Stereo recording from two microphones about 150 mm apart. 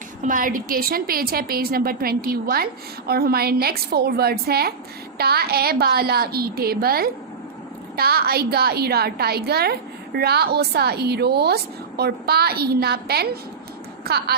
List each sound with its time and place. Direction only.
0.2 s a woman's voice: 65° right (ahead or behind); by 14.3 s 90° right